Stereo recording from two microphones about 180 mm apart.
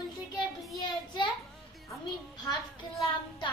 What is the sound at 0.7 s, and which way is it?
Speech, 25° left (ahead or behind).